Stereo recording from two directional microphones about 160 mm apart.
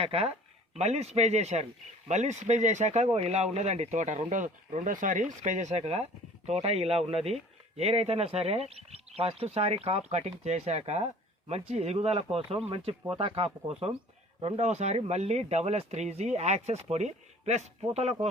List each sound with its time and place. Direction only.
0.0 s speech: 40° right (ahead or behind)